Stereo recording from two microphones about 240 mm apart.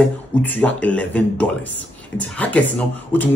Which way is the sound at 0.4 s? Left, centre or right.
Centre.